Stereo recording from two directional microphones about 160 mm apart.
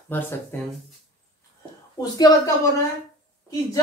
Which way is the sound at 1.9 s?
25° left (ahead or behind).